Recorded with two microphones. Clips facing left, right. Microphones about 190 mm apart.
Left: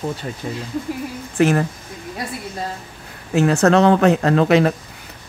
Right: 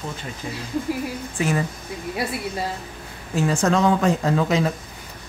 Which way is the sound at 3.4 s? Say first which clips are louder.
Left 6 dB; 65° left (ahead or behind).